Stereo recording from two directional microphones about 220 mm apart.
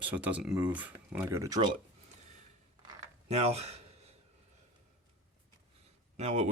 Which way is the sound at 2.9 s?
25° right (ahead or behind).